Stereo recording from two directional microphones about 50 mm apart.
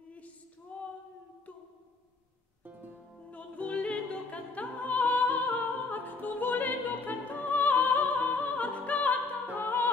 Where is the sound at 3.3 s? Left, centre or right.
Left.